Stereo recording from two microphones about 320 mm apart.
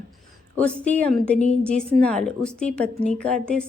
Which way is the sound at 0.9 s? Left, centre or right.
Centre.